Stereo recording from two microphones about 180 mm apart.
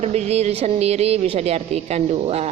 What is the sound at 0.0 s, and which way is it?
Speech, 35° right (ahead or behind).